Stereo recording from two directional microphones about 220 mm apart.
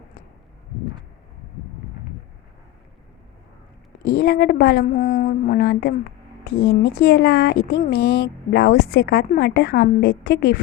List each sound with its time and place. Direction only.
4.0 s speech: 45° left (ahead or behind)